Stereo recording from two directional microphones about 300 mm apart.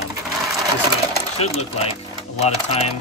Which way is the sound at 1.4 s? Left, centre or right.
Centre.